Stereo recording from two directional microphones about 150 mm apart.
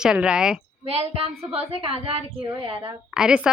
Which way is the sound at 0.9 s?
40° right (ahead or behind).